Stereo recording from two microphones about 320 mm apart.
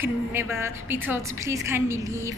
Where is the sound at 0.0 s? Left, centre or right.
Centre.